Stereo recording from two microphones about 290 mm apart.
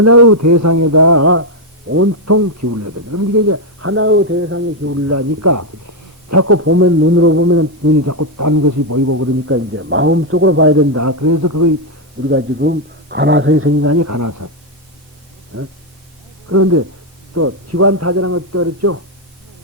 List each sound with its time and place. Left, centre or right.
0.0 s a man's voice: right
12.2 s a man's voice: right
15.5 s a man's voice: right
16.5 s speech: right